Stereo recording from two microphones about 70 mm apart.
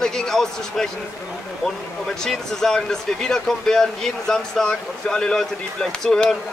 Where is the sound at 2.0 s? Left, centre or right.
Centre.